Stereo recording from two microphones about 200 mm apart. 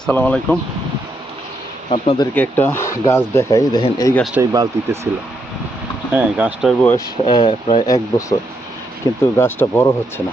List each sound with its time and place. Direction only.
0.0 s speech: 5° left (ahead or behind)
1.9 s speech: 25° left (ahead or behind)
2.3 s speech: 10° left (ahead or behind)
4.4 s speech: 15° right (ahead or behind)
6.1 s speech: 10° right (ahead or behind)
6.8 s speech: 20° left (ahead or behind)